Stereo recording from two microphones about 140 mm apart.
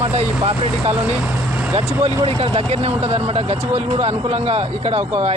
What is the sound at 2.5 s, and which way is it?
A man's voice, 45° right (ahead or behind).